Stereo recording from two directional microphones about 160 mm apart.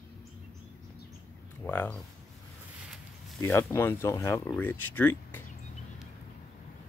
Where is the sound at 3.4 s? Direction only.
15° left (ahead or behind).